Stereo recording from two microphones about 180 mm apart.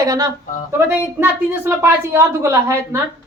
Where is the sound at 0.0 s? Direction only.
20° right (ahead or behind).